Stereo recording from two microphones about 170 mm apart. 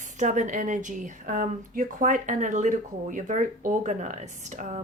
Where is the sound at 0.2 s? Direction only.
45° right (ahead or behind).